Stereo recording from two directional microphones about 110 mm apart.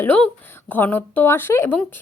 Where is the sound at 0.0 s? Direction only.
15° left (ahead or behind).